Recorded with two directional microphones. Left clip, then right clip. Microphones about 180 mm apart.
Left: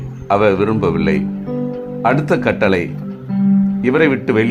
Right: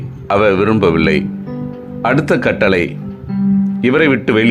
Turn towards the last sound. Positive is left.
turn(degrees=-15)  # may be behind; listen again after turning